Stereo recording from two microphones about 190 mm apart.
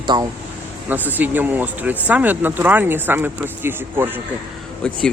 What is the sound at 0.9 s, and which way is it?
Speech, 10° right (ahead or behind).